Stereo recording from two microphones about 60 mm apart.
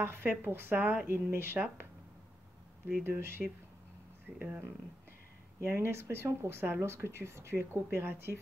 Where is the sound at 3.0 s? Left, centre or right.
Right.